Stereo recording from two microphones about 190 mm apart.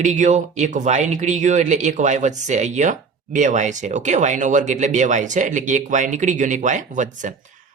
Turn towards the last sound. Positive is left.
turn(degrees=-40)  # may be behind; listen again after turning